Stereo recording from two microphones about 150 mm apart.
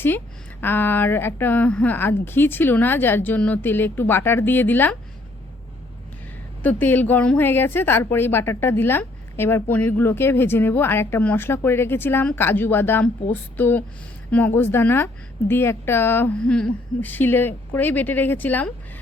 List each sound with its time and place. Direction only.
0.6 s a woman's voice: 15° left (ahead or behind)
6.6 s a woman's voice: 10° left (ahead or behind)